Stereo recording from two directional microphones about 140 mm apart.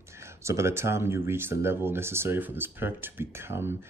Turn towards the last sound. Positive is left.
turn(degrees=-15)  # may be behind; listen again after turning